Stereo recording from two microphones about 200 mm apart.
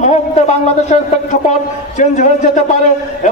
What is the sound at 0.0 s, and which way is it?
A man's voice, 35° left (ahead or behind).